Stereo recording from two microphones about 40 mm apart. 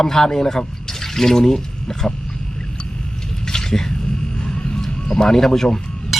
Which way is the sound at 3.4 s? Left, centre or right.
Centre.